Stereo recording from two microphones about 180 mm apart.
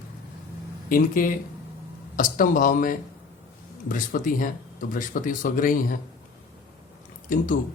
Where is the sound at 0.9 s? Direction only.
50° left (ahead or behind).